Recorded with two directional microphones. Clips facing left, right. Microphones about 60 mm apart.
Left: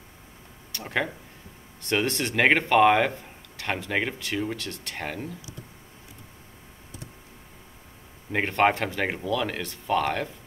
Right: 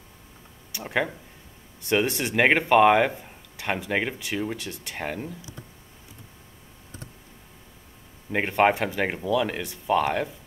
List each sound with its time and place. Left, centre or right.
0.7 s speech: centre
8.3 s speech: centre